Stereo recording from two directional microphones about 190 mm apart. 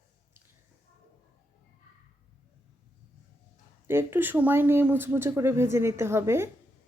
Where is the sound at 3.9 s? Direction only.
10° right (ahead or behind).